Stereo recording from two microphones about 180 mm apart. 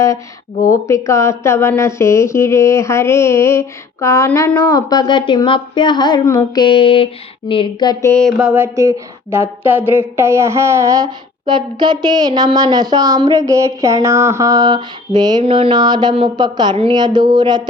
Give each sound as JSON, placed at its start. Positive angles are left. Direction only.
{"t": 0.7, "sound": "speech", "side_deg": 15}
{"t": 8.0, "sound": "speech", "side_deg": 10}
{"t": 8.4, "sound": "speech", "side_deg": -10}